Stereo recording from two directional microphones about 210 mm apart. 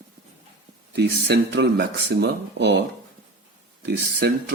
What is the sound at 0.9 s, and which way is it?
Speech, 50° right (ahead or behind).